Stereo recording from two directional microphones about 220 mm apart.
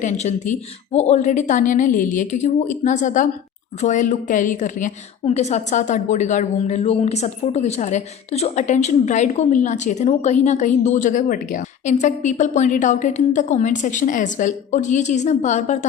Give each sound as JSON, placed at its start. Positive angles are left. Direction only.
{"t": 0.0, "sound": "a woman's voice", "side_deg": 30}